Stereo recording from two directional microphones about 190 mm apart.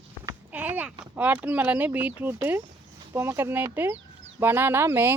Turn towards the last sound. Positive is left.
turn(degrees=-10)  # may be behind; listen again after turning